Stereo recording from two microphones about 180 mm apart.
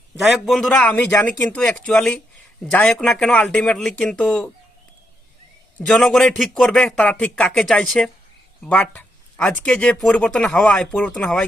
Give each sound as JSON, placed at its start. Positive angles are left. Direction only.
{"t": 0.2, "sound": "speech", "side_deg": 0}
{"t": 5.8, "sound": "speech", "side_deg": 0}